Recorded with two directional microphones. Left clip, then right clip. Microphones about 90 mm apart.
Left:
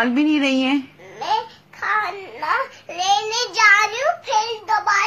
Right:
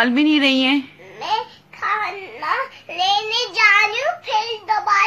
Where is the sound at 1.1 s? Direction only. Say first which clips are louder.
Even; 35° left (ahead or behind).